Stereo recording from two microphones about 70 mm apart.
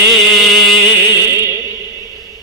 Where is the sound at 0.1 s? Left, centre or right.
Centre.